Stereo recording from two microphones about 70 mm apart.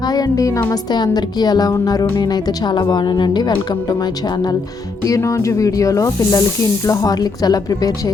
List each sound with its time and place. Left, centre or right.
0.0 s speech: left
0.7 s speech: left
1.7 s speech: left
5.0 s a woman's voice: left